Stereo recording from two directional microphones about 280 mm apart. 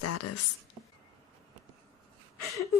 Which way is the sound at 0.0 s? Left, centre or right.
Left.